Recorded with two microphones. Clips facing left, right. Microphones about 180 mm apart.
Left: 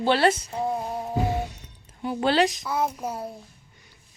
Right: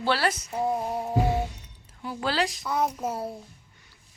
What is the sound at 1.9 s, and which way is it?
Speech, 20° left (ahead or behind).